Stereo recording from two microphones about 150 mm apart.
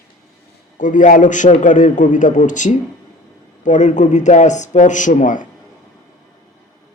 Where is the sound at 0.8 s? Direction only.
60° left (ahead or behind).